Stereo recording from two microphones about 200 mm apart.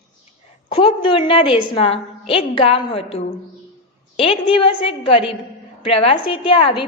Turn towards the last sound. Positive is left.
turn(degrees=25)  # may be behind; listen again after turning